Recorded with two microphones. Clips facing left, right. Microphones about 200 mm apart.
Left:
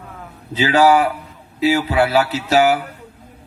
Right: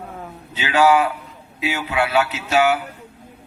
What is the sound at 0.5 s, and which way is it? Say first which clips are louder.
Speech: left 3 dB; 35° left (ahead or behind).